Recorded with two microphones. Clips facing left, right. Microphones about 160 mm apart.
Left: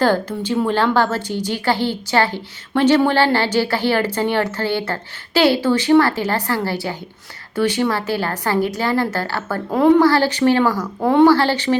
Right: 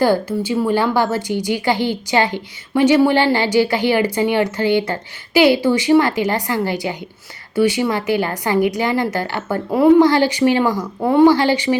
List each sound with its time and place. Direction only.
0.0 s a woman's voice: 10° right (ahead or behind)